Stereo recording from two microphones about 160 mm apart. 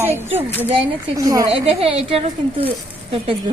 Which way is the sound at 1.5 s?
40° right (ahead or behind).